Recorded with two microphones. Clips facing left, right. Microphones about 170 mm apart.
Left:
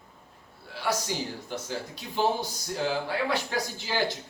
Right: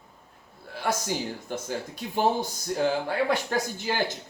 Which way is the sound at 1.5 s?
50° right (ahead or behind).